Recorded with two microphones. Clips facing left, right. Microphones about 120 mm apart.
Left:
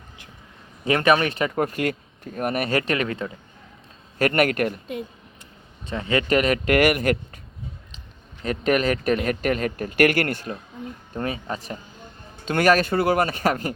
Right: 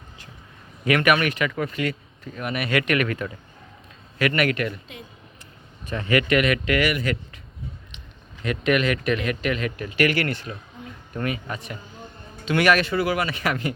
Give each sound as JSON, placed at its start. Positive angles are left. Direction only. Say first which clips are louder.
{"t": 0.9, "sound": "speech", "louder": "left 1 dB", "side_deg": 30}
{"t": 4.2, "sound": "speech", "louder": "left 2 dB", "side_deg": 45}
{"t": 5.8, "sound": "a man's voice", "louder": "right 1 dB", "side_deg": 25}
{"t": 6.2, "sound": "speech", "louder": "left 1 dB", "side_deg": 35}
{"t": 7.9, "sound": "speech", "louder": "right 1 dB", "side_deg": 35}
{"t": 11.1, "sound": "speech", "louder": "even", "side_deg": 30}
{"t": 12.5, "sound": "speech", "louder": "left 1 dB", "side_deg": 45}